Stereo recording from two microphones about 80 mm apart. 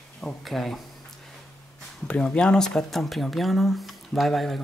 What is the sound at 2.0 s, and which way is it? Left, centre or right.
Speech, centre.